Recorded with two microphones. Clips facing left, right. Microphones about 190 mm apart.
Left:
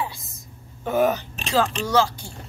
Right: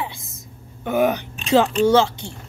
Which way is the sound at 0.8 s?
10° right (ahead or behind).